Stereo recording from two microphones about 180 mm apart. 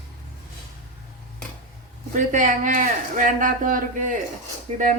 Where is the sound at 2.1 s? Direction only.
45° right (ahead or behind).